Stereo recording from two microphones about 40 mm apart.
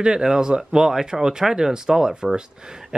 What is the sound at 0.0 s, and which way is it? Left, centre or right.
Speech, centre.